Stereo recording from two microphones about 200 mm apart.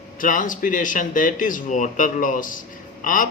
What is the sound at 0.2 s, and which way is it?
Speech, 40° left (ahead or behind).